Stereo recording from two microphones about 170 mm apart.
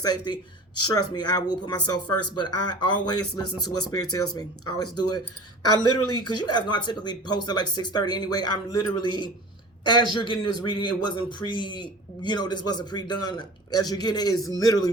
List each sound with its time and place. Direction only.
0.0 s a man's voice: 25° left (ahead or behind)